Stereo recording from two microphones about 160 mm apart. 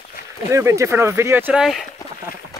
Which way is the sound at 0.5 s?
20° right (ahead or behind).